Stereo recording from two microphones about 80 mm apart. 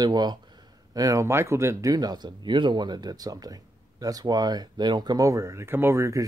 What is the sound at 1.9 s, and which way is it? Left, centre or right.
Speech, right.